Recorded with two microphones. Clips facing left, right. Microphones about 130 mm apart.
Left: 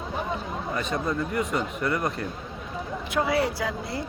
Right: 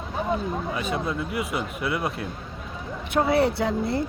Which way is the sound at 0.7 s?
5° right (ahead or behind).